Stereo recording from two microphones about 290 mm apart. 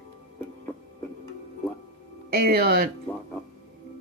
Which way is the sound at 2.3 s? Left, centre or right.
Right.